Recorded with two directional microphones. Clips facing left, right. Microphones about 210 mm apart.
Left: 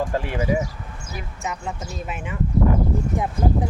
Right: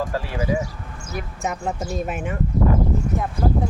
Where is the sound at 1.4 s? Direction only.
50° right (ahead or behind).